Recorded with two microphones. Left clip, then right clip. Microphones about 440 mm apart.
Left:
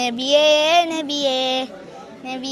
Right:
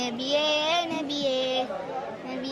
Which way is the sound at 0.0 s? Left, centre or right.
Left.